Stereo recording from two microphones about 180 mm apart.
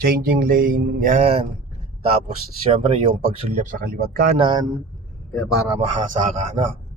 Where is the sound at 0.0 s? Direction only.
55° right (ahead or behind).